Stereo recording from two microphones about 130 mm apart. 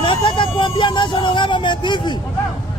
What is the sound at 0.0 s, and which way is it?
Vehicle, 40° left (ahead or behind).